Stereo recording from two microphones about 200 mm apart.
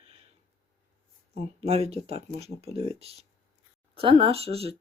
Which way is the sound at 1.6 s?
30° right (ahead or behind).